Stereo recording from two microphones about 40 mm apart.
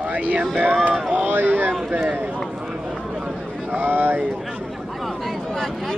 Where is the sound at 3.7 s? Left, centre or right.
Right.